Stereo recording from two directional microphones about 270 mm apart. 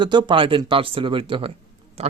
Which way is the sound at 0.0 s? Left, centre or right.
Centre.